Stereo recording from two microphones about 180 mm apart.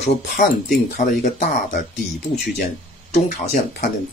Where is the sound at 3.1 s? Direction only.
40° left (ahead or behind).